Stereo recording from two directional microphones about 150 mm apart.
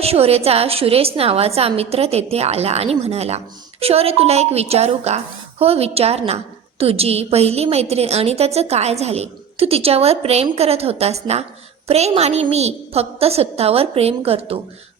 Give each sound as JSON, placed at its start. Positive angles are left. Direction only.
{"t": 0.0, "sound": "a woman's voice", "side_deg": -40}